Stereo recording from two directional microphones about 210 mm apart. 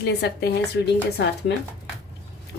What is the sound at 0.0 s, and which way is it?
A woman's voice, 50° left (ahead or behind).